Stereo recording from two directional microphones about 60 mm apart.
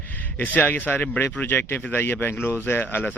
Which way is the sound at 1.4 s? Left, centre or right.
Left.